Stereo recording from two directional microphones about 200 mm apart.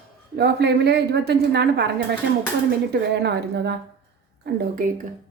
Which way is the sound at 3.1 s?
60° right (ahead or behind).